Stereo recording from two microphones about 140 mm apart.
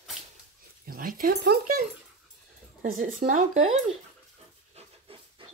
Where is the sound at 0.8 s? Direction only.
90° right.